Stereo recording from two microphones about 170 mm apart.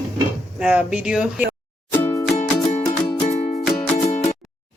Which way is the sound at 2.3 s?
40° left (ahead or behind).